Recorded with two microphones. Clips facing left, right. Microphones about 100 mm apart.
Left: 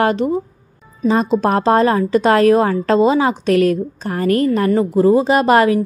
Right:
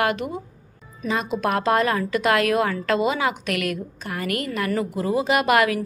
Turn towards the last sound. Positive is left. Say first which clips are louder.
# left 7 dB
turn(degrees=30)  # may be behind; listen again after turning